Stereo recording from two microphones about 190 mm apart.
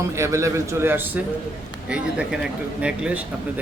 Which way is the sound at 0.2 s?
15° right (ahead or behind).